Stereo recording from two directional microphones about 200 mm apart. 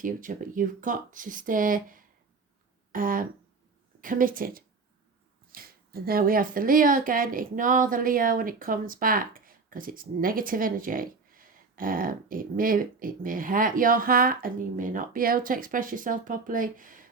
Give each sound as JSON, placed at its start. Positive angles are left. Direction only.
{"t": 0.0, "sound": "speech", "side_deg": -40}